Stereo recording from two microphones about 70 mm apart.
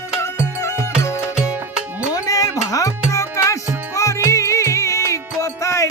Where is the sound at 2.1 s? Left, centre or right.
Left.